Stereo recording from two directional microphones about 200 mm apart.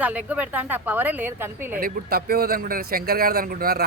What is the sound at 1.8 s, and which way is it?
Speech, 50° right (ahead or behind).